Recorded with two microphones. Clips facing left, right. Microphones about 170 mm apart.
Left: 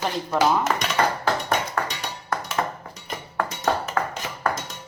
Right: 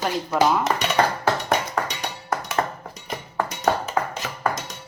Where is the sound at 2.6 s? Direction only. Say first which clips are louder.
Right 2 dB; 5° right (ahead or behind).